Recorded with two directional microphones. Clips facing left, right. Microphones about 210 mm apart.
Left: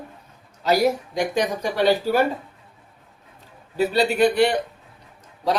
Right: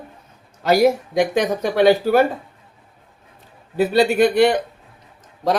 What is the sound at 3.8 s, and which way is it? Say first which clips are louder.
Speech: right 3 dB; 50° right (ahead or behind).